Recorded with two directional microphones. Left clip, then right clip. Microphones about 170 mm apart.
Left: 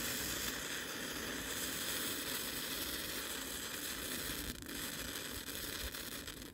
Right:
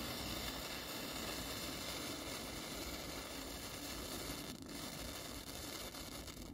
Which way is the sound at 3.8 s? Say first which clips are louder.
Left 4 dB; 25° left (ahead or behind).